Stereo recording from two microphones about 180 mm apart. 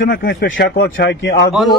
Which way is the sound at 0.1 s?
60° left (ahead or behind).